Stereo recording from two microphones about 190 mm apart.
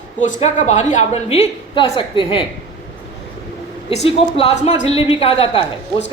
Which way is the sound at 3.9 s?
35° left (ahead or behind).